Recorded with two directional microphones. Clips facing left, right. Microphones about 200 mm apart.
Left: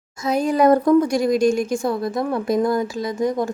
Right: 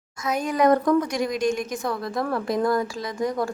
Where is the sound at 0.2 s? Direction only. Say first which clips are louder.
Left 5 dB; 30° left (ahead or behind).